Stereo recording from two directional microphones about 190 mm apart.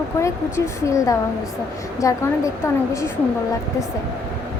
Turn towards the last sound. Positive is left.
turn(degrees=15)  # may be behind; listen again after turning